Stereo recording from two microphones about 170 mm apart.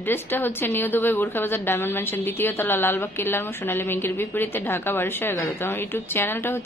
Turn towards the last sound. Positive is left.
turn(degrees=10)  # may be behind; listen again after turning